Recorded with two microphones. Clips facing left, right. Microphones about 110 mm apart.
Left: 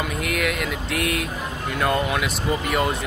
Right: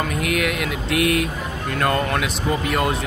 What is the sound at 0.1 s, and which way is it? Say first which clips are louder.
Speech: right 2 dB; centre (ahead or behind).